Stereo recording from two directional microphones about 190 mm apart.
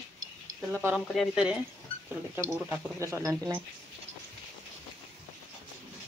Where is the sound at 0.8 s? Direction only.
Centre (ahead or behind); by 3.5 s 20° right (ahead or behind).